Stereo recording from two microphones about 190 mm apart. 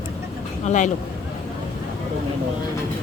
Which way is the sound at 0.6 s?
40° left (ahead or behind).